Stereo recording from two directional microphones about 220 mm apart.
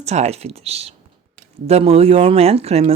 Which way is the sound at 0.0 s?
30° right (ahead or behind).